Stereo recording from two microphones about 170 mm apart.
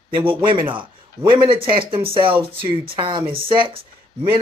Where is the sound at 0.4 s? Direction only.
30° right (ahead or behind).